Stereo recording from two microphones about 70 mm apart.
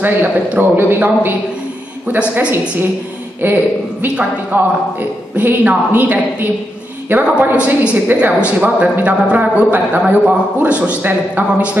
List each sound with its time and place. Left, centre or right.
0.0 s a woman's voice: right
2.1 s a woman's voice: centre
3.3 s a woman's voice: right
7.5 s a woman's voice: centre